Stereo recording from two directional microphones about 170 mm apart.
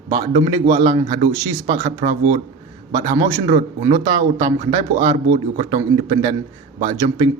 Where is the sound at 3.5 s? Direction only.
45° right (ahead or behind).